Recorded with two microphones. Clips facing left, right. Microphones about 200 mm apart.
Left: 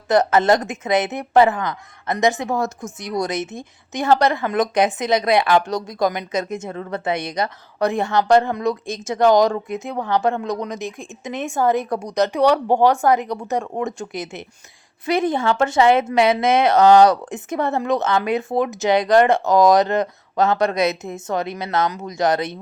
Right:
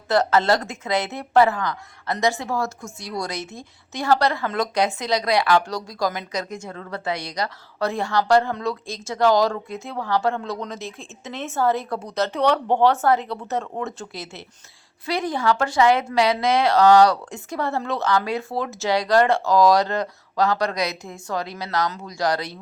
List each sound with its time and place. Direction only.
0.1 s a woman's voice: 20° left (ahead or behind)